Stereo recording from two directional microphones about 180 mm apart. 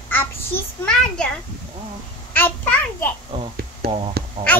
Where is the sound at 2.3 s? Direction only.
10° left (ahead or behind).